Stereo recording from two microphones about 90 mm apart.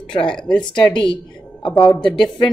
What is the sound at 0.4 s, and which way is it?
Speech, 10° left (ahead or behind).